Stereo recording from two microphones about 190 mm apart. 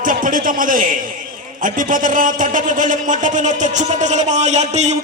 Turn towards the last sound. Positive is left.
turn(degrees=-35)  # may be behind; listen again after turning